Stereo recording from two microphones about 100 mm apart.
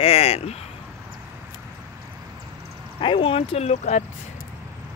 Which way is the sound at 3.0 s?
60° left (ahead or behind).